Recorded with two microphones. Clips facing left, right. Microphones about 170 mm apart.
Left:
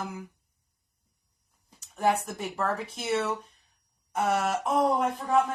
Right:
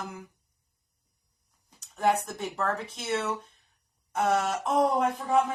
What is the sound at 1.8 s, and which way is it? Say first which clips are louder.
A woman's voice: even; 5° left (ahead or behind).